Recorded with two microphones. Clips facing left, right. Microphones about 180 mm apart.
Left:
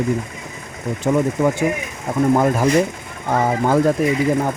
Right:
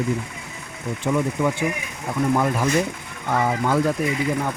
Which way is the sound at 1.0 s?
45° left (ahead or behind).